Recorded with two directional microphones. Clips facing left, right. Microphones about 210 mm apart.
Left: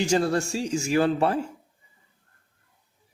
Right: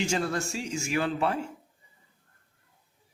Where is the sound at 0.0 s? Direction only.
35° left (ahead or behind).